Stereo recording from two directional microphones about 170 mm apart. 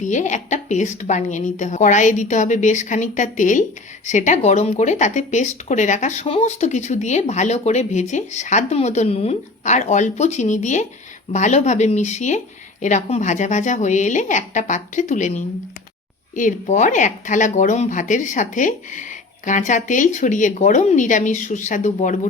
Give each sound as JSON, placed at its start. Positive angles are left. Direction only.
{"t": 0.0, "sound": "speech", "side_deg": 45}